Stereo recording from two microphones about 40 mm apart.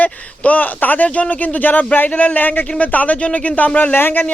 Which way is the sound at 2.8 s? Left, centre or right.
Left.